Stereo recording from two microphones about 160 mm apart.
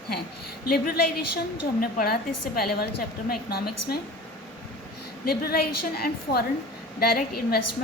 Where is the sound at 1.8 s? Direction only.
65° left (ahead or behind).